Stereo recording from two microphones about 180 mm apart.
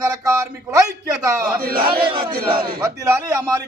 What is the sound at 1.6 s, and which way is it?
Speech, 55° right (ahead or behind).